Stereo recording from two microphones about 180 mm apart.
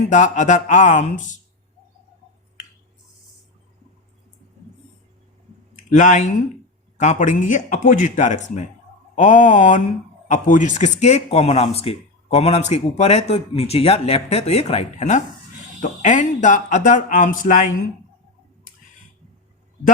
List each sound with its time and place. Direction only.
0.0 s speech: 40° left (ahead or behind)
5.9 s speech: 45° left (ahead or behind)